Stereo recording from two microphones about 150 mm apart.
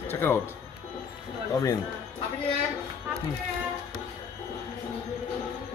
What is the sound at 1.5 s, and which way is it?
Speech, 25° left (ahead or behind).